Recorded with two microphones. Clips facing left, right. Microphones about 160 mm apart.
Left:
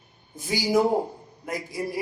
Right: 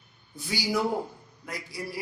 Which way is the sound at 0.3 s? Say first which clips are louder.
Left 6 dB; 45° left (ahead or behind).